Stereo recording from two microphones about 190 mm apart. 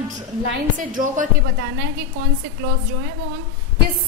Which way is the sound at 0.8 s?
45° right (ahead or behind).